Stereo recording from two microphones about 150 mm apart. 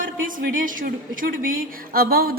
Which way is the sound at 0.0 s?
65° right (ahead or behind).